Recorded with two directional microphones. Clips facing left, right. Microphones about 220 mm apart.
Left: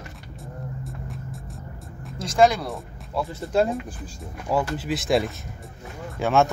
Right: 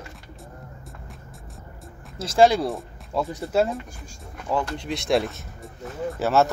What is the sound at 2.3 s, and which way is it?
Speech, 30° right (ahead or behind).